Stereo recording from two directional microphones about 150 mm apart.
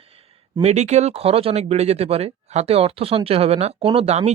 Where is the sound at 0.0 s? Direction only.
40° right (ahead or behind).